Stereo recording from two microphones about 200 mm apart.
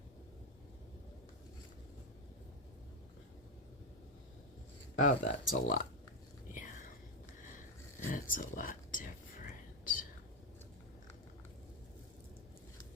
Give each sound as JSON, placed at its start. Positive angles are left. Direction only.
{"t": 4.9, "sound": "speech", "side_deg": 40}
{"t": 8.1, "sound": "whispering", "side_deg": 40}